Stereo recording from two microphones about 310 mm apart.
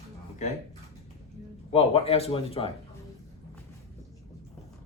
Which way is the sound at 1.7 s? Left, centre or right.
Centre.